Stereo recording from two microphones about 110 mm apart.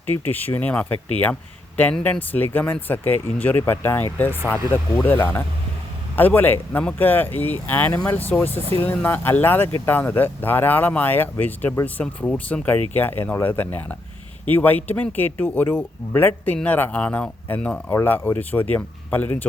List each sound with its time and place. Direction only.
0.1 s speech: 15° left (ahead or behind)
5.0 s speech: 20° left (ahead or behind)